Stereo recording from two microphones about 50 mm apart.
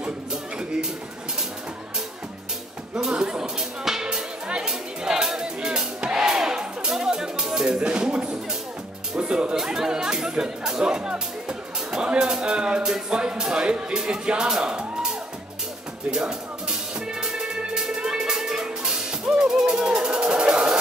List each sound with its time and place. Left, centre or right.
0.0 s music: centre
2.9 s music: centre
9.1 s speech: centre
16.1 s music: centre